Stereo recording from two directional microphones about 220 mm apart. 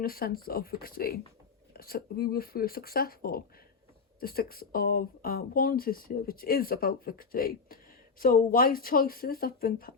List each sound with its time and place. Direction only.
0.0 s speech: 40° left (ahead or behind)